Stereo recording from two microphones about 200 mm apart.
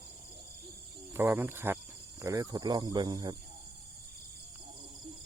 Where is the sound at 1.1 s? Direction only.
10° right (ahead or behind).